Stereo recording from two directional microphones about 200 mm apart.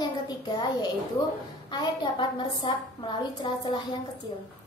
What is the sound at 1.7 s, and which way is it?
A woman's voice, 20° left (ahead or behind).